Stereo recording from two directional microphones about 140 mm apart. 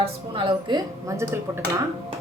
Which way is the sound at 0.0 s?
35° right (ahead or behind).